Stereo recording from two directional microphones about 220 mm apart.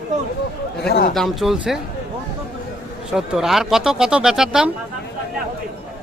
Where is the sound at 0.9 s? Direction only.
45° left (ahead or behind).